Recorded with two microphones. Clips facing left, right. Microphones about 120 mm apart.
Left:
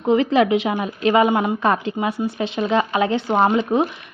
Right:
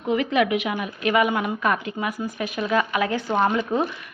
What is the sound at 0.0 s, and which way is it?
A woman's voice, 30° left (ahead or behind).